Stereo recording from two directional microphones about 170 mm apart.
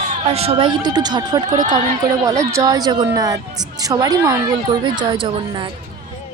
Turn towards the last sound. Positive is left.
turn(degrees=-30)  # may be behind; listen again after turning